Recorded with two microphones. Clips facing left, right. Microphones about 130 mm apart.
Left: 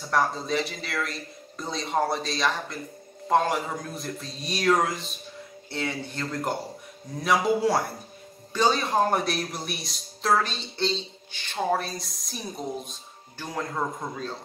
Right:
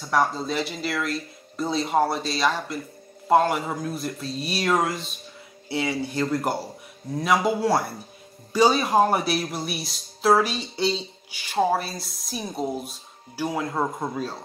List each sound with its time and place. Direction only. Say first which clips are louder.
0.1 s speech: right 2 dB; centre (ahead or behind)